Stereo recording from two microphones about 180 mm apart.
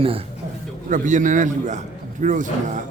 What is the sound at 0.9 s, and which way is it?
Speech, 45° right (ahead or behind).